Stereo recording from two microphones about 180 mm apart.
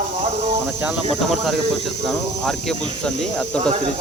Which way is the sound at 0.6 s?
5° right (ahead or behind).